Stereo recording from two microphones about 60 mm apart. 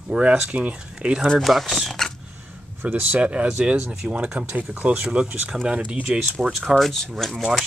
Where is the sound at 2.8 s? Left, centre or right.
Right.